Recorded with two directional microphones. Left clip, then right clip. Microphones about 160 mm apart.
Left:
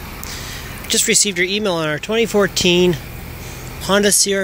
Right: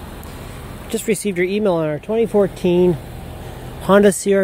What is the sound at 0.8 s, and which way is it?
Speech, 20° right (ahead or behind).